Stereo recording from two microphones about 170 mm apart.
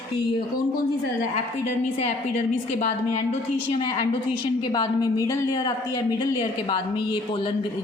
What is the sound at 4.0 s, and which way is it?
A woman's voice, 30° left (ahead or behind).